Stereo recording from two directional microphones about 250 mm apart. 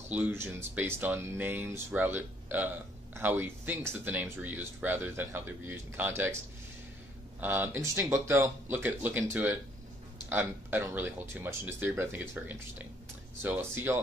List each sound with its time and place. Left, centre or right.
0.1 s speech: centre